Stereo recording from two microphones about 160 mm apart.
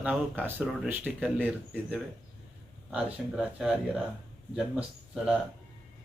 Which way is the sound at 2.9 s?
5° right (ahead or behind).